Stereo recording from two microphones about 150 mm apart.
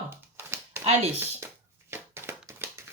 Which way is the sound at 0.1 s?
15° right (ahead or behind).